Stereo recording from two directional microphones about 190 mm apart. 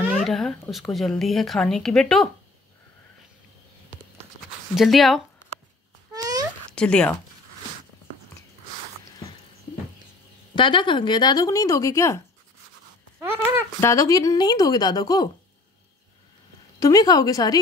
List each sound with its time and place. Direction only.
0.1 s speech: centre (ahead or behind)
4.7 s speech: centre (ahead or behind)
6.1 s a sound: 20° right (ahead or behind)
6.7 s speech: 5° left (ahead or behind)
10.5 s speech: 25° left (ahead or behind)
13.2 s speech: 10° right (ahead or behind)
13.7 s speech: 15° left (ahead or behind)
16.8 s speech: 20° left (ahead or behind)